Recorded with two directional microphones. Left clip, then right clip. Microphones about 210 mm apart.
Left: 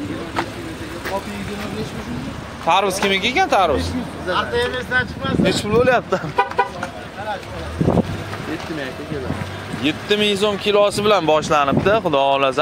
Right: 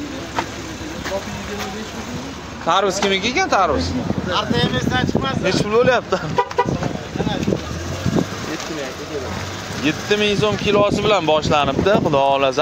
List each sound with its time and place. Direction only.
2.7 s speech: 5° left (ahead or behind)
4.3 s speech: 50° right (ahead or behind)
5.4 s speech: 10° left (ahead or behind)
9.8 s speech: 15° left (ahead or behind)